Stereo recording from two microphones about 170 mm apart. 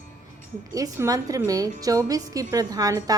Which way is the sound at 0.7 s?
20° right (ahead or behind).